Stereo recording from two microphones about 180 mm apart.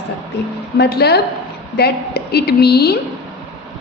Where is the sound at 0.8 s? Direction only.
65° left (ahead or behind).